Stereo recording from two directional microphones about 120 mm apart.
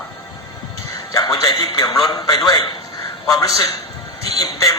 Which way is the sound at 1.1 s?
30° left (ahead or behind).